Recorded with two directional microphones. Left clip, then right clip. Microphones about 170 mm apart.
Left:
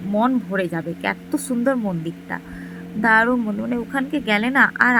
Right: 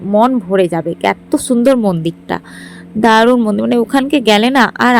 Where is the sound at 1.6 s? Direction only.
40° right (ahead or behind).